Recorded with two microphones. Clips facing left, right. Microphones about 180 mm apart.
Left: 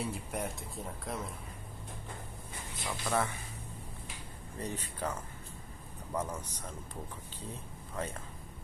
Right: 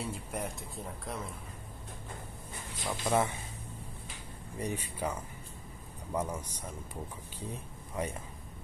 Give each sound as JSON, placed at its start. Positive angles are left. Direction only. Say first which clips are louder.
{"t": 0.0, "sound": "speech", "louder": "left 1 dB", "side_deg": 0}
{"t": 2.9, "sound": "speech", "louder": "right 3 dB", "side_deg": -20}
{"t": 4.6, "sound": "speech", "louder": "right 3 dB", "side_deg": -10}
{"t": 6.1, "sound": "speech", "louder": "right 2 dB", "side_deg": -10}
{"t": 7.9, "sound": "speech", "louder": "right 3 dB", "side_deg": -15}